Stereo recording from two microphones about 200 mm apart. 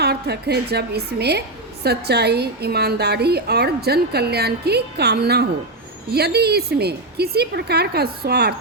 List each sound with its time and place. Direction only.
0.0 s a woman's voice: 55° right (ahead or behind)